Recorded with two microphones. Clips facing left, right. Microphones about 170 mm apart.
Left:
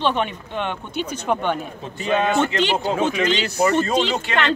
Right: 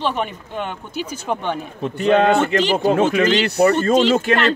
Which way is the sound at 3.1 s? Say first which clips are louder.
Right 4 dB; 50° right (ahead or behind).